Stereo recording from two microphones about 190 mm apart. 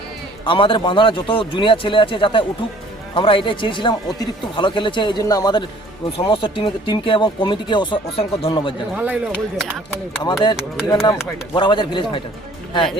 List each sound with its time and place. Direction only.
0.4 s speech: 25° left (ahead or behind)
9.0 s speech: 10° right (ahead or behind)
10.2 s speech: 25° left (ahead or behind)